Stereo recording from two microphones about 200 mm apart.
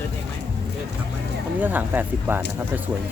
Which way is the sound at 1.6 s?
10° right (ahead or behind).